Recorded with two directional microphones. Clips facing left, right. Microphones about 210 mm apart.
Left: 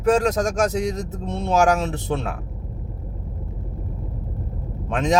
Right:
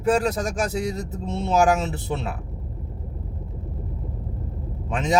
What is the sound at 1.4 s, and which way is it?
Speech, 5° right (ahead or behind).